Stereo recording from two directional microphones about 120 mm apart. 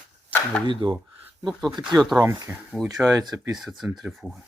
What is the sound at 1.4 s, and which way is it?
Speech, centre (ahead or behind).